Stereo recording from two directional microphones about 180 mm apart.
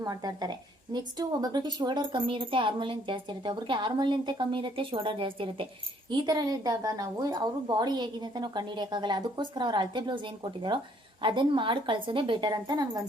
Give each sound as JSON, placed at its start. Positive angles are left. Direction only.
{"t": 0.0, "sound": "speech", "side_deg": -20}